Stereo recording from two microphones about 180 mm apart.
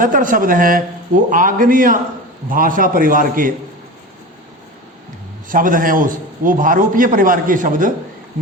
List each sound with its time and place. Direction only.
0.0 s a man's voice: 50° right (ahead or behind)
5.5 s a man's voice: 50° right (ahead or behind)